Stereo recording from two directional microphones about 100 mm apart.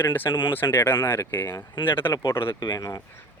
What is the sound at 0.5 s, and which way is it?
Speech, 20° left (ahead or behind).